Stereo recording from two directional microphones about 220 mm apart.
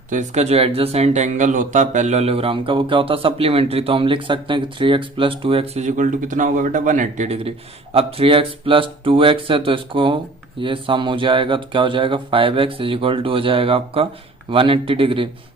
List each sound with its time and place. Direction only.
0.1 s speech: 30° right (ahead or behind)